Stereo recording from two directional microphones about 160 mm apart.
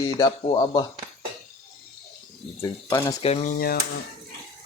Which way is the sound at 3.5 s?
70° left (ahead or behind).